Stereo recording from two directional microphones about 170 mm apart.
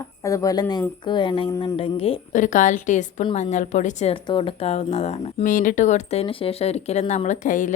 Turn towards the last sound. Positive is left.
turn(degrees=50)  # may be behind; listen again after turning